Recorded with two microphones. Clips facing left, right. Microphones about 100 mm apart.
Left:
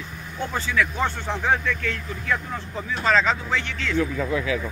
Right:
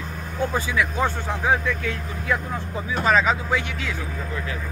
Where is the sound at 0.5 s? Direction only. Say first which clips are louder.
Left 3 dB; 10° right (ahead or behind).